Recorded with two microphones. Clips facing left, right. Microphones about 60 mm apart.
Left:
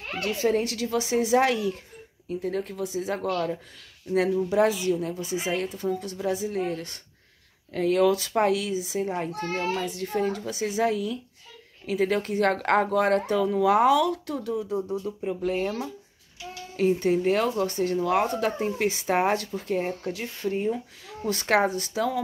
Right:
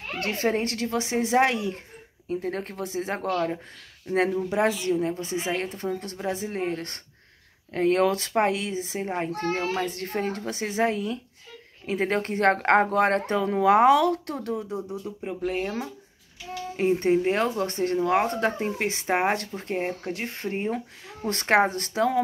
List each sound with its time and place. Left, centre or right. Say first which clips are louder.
0.2 s a child's voice: left 1 dB; right
2.2 s speech: even; right
3.2 s a child's voice: right 2 dB; right
4.1 s a child's voice: left 1 dB; right
14.5 s speech: left 4 dB; right
16.7 s a child's voice: right 1 dB; right
21.3 s a child's voice: right 1 dB; right